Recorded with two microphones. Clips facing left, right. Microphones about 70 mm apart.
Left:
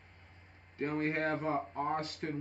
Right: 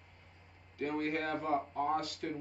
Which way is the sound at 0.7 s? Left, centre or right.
Left.